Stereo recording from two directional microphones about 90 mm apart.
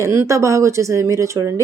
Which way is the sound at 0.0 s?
30° right (ahead or behind).